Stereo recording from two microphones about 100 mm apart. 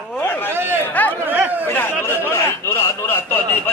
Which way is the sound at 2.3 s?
25° left (ahead or behind).